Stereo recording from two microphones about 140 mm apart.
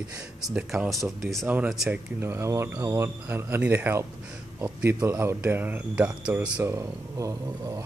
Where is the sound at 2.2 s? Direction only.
20° right (ahead or behind).